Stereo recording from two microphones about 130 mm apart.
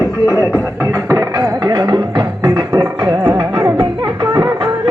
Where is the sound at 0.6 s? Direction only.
25° right (ahead or behind).